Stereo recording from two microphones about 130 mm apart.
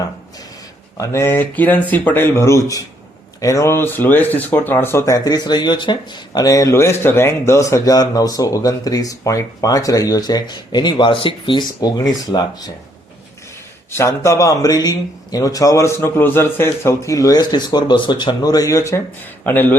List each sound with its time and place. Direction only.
0.9 s speech: 20° left (ahead or behind)
13.9 s speech: 20° left (ahead or behind)